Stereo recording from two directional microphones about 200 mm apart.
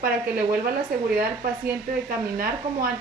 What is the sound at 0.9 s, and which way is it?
Speech, 45° right (ahead or behind).